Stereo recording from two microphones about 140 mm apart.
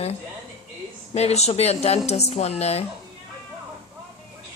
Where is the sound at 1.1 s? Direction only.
50° left (ahead or behind).